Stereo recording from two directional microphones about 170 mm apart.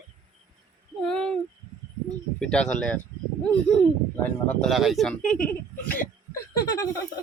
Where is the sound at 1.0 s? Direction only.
5° left (ahead or behind).